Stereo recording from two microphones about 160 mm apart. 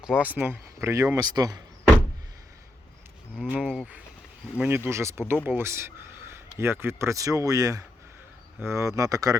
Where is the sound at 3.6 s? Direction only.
5° left (ahead or behind).